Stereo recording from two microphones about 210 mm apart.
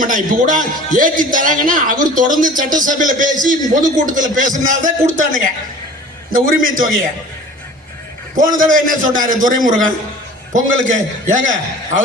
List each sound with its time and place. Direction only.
0.0 s a man's voice: 40° right (ahead or behind)
8.4 s a man's voice: 40° right (ahead or behind)